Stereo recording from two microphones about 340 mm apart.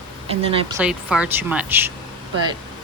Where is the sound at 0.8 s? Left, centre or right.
Centre.